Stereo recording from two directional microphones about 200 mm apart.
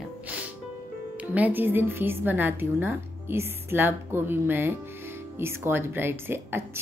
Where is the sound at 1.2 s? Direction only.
10° right (ahead or behind).